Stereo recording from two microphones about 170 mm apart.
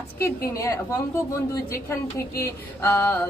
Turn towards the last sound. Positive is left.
turn(degrees=15)  # may be behind; listen again after turning